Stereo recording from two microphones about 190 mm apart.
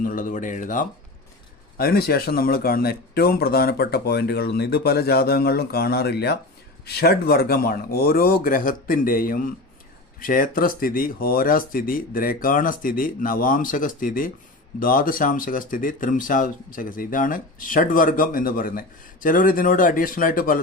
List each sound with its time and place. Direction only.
0.0 s speech: 45° left (ahead or behind)